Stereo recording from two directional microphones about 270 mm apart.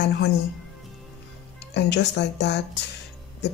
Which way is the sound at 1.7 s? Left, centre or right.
Left.